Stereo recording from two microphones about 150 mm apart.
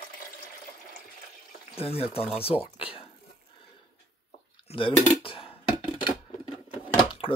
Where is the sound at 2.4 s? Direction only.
40° left (ahead or behind).